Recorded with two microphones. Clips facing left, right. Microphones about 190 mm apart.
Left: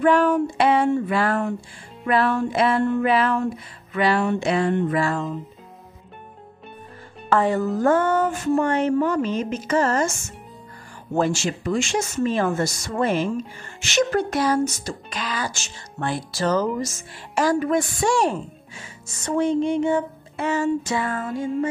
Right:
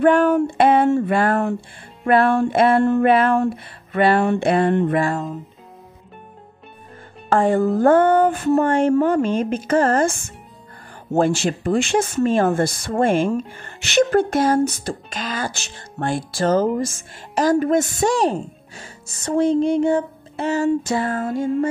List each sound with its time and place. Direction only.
0.0 s speech: 50° right (ahead or behind)
7.2 s speech: 50° right (ahead or behind)